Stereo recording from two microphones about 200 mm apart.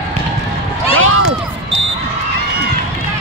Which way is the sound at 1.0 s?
90° right.